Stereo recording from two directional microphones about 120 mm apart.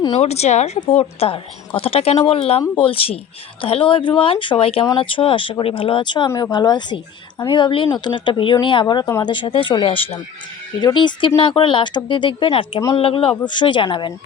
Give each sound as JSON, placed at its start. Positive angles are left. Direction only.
{"t": 0.2, "sound": "speech", "side_deg": 60}
{"t": 0.9, "sound": "speech", "side_deg": 50}
{"t": 10.8, "sound": "speech", "side_deg": 40}